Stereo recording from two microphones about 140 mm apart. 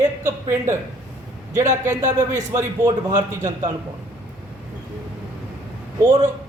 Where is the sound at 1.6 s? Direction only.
60° right (ahead or behind).